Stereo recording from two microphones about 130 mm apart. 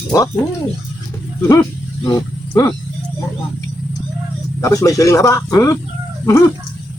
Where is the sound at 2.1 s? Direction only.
25° left (ahead or behind).